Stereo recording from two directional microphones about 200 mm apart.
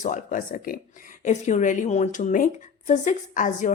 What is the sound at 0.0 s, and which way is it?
A woman's voice, 40° left (ahead or behind).